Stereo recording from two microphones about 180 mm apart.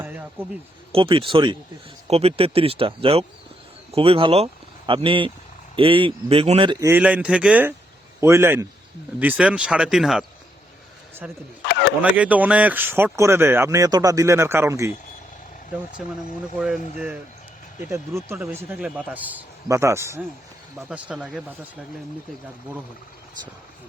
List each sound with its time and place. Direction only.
0.0 s a sound: 10° right (ahead or behind)
0.9 s speech: 30° right (ahead or behind)
6.7 s speech: 15° right (ahead or behind)
11.7 s a sound: 70° left (ahead or behind)
12.1 s speech: 10° right (ahead or behind)
16.0 s speech: centre (ahead or behind)
17.7 s speech: 15° right (ahead or behind)